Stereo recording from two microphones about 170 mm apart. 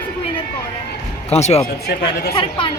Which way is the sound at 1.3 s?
40° left (ahead or behind).